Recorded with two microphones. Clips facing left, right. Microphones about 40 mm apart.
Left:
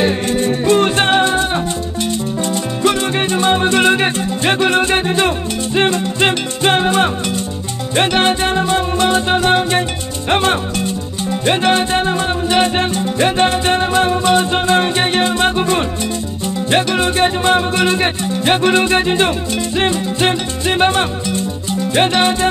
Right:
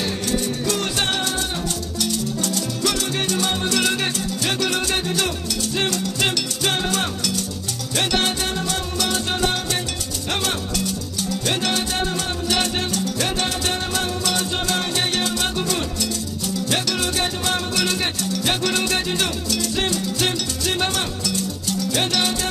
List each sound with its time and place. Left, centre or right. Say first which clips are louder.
0.0 s music: left 8 dB; left